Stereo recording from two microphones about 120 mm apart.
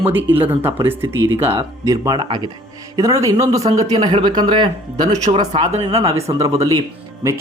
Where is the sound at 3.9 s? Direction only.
45° right (ahead or behind).